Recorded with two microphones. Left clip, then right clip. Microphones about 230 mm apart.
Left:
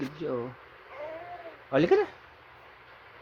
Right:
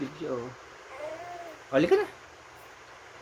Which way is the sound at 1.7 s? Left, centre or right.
Left.